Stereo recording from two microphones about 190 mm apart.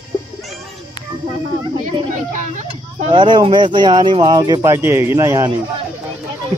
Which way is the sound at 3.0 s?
25° right (ahead or behind).